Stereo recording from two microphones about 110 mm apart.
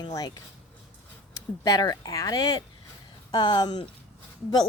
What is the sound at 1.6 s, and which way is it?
Speech, 35° left (ahead or behind).